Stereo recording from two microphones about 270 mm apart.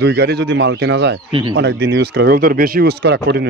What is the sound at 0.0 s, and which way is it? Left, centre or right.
Speech, right.